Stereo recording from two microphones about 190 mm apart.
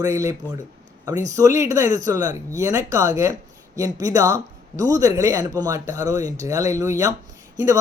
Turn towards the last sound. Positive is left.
turn(degrees=-15)  # may be behind; listen again after turning